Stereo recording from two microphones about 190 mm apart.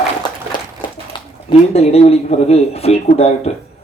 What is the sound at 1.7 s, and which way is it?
A man's voice, 35° left (ahead or behind).